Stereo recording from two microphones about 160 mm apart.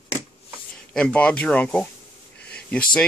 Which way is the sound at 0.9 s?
5° left (ahead or behind).